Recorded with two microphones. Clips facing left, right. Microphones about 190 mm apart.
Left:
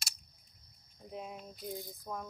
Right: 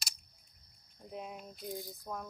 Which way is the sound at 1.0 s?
Centre (ahead or behind).